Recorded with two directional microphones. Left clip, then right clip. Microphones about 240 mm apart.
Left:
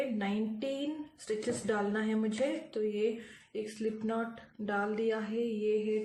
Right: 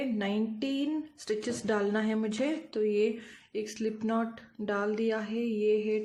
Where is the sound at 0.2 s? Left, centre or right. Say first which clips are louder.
Right 3 dB; right.